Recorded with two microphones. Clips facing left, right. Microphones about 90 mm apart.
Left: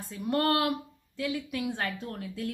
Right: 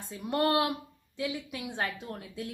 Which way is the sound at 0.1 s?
15° right (ahead or behind).